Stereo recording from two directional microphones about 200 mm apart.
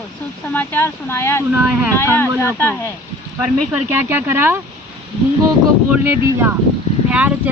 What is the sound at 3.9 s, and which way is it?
Speech, 10° right (ahead or behind).